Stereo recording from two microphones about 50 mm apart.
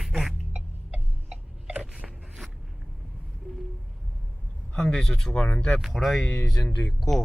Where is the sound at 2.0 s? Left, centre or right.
Centre.